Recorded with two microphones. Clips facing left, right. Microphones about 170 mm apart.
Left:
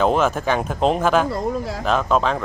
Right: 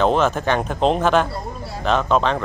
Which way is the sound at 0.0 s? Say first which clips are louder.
Even; 5° left (ahead or behind).